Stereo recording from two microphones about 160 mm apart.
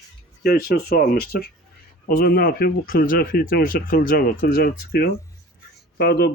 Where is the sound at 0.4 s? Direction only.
70° left (ahead or behind).